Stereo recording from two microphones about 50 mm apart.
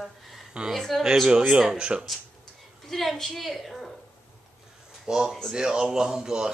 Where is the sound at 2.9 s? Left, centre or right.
Centre.